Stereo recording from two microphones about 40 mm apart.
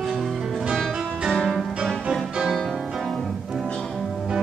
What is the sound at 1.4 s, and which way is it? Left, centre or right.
Music, centre.